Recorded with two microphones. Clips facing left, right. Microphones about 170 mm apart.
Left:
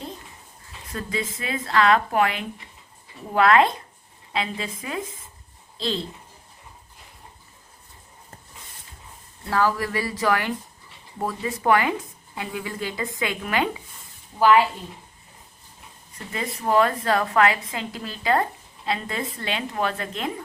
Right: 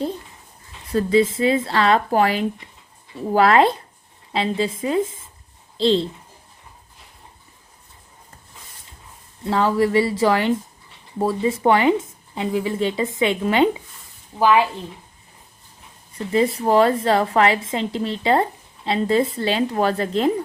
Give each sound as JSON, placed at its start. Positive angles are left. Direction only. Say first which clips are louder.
{"t": 0.9, "sound": "a woman's voice", "louder": "right 13 dB", "side_deg": -30}
{"t": 9.5, "sound": "a woman's voice", "louder": "right 5 dB", "side_deg": -25}
{"t": 16.1, "sound": "a woman's voice", "louder": "right 12 dB", "side_deg": -30}